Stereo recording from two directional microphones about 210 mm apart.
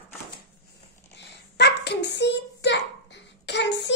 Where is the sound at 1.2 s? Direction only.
55° left (ahead or behind).